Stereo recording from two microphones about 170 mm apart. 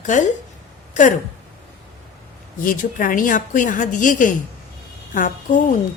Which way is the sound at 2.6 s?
55° left (ahead or behind).